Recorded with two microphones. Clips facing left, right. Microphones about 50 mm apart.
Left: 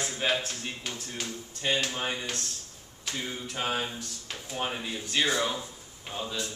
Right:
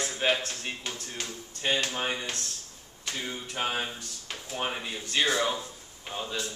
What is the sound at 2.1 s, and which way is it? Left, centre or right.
Speech, centre.